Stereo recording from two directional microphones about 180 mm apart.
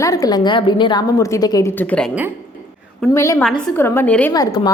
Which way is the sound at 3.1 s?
15° left (ahead or behind).